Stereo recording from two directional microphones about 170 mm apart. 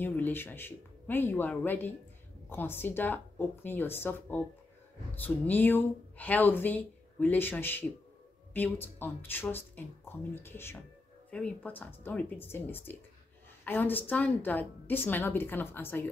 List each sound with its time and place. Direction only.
0.0 s speech: 10° left (ahead or behind)